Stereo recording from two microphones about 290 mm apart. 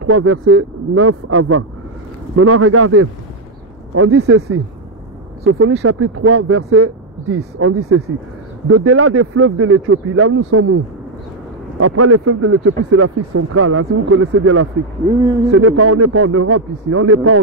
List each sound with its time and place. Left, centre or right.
0.0 s speech: right
5.4 s speech: right
5.7 s speech: right
11.8 s speech: right